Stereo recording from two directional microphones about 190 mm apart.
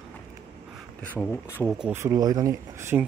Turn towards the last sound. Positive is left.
turn(degrees=-15)  # may be behind; listen again after turning